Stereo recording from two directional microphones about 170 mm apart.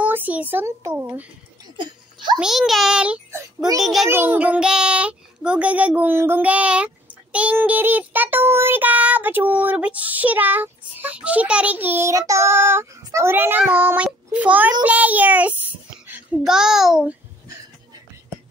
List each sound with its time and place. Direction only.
0.0 s a child's voice: 10° right (ahead or behind)
2.3 s a child's voice: 5° right (ahead or behind)
3.3 s a child's voice: 15° right (ahead or behind)
3.7 s a child's voice: centre (ahead or behind)
4.1 s child singing: 10° right (ahead or behind)
16.1 s a child's voice: 5° right (ahead or behind)